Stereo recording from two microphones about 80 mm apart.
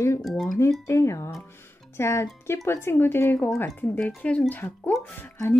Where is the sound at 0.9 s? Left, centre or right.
Left.